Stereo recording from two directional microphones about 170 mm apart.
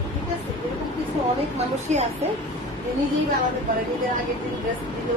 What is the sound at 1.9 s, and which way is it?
Speech, 45° right (ahead or behind).